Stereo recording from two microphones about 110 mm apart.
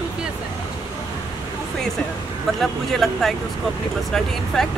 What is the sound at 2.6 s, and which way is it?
Speech, centre (ahead or behind).